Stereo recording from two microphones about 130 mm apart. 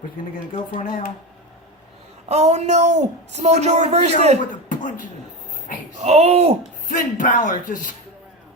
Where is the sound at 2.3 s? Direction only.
55° right (ahead or behind).